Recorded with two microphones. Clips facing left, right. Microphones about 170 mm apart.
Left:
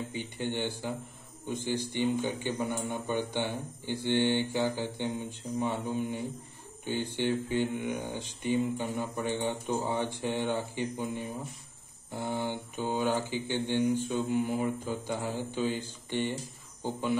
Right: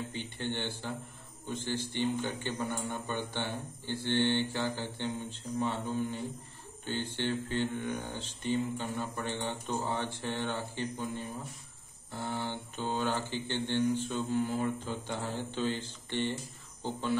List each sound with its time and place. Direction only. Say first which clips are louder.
0.1 s speech: left 3 dB; 10° left (ahead or behind)